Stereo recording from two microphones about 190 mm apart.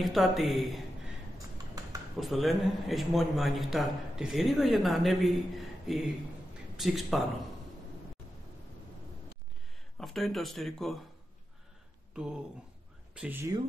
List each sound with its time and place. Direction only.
0.0 s a man's voice: centre (ahead or behind)
1.8 s typing: 20° right (ahead or behind)
2.1 s a man's voice: centre (ahead or behind)
9.9 s a man's voice: centre (ahead or behind)
13.1 s speech: 10° right (ahead or behind)